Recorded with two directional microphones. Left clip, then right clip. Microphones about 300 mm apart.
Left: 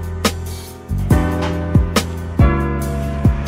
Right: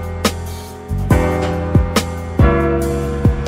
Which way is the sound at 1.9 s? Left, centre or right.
Centre.